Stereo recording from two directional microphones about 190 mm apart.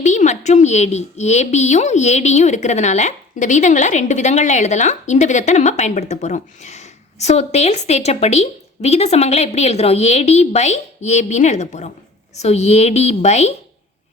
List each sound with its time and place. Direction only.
0.0 s a woman's voice: 40° left (ahead or behind)